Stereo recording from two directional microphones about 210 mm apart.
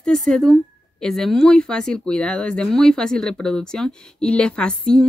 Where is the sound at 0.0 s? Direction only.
Centre (ahead or behind).